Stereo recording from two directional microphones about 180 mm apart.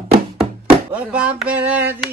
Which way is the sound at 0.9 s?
5° right (ahead or behind).